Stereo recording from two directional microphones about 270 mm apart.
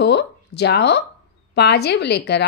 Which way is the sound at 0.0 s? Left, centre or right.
Left.